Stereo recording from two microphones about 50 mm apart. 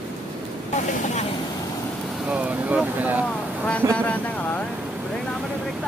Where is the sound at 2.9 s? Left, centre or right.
Right.